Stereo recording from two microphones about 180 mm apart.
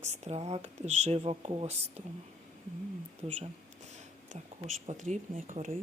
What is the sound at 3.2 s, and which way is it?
Speech, 40° right (ahead or behind).